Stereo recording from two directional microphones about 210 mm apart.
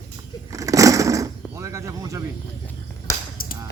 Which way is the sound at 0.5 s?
15° right (ahead or behind).